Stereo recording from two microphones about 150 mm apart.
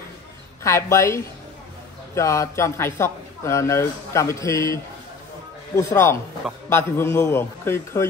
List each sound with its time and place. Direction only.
0.7 s a man's voice: 20° left (ahead or behind)
5.8 s a man's voice: 20° left (ahead or behind)